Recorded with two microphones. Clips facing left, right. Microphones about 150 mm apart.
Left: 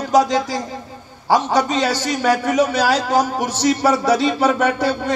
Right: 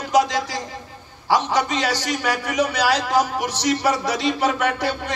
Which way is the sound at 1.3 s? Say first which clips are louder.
Left 3 dB; 45° left (ahead or behind).